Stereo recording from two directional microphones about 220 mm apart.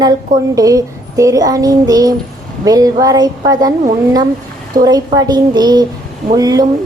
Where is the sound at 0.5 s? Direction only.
15° right (ahead or behind).